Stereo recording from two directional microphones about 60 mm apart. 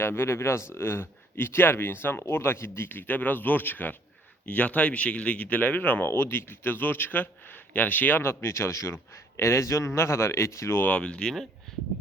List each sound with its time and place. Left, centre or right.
0.0 s a man's voice: left
6.1 s speech: left
8.2 s a man's voice: left
10.8 s speech: centre